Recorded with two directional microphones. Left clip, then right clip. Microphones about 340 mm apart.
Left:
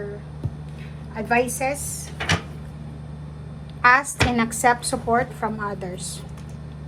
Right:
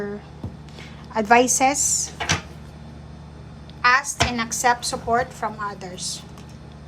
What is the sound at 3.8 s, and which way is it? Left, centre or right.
A woman's voice, centre.